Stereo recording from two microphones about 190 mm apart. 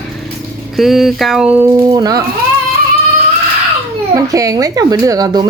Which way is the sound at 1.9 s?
20° right (ahead or behind).